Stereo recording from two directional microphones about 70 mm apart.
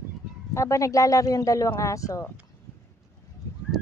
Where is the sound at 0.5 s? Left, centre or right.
Left.